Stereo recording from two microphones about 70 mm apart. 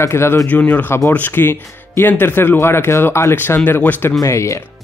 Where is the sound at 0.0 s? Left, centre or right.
Left.